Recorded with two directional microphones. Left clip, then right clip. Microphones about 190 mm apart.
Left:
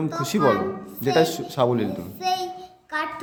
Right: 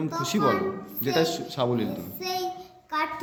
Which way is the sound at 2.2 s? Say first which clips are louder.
Left 7 dB; 5° left (ahead or behind).